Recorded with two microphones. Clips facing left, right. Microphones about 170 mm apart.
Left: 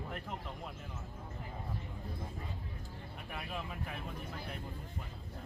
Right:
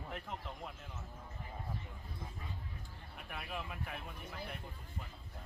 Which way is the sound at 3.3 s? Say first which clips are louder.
Left 1 dB; centre (ahead or behind).